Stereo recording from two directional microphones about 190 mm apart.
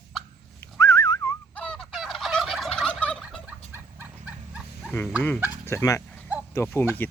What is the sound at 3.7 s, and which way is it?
Dog, 10° right (ahead or behind).